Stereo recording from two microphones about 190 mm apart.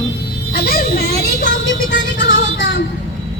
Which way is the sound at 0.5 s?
50° left (ahead or behind).